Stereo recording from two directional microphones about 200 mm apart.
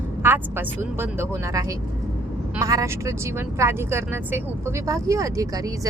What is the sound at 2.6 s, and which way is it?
A woman's voice, 15° right (ahead or behind).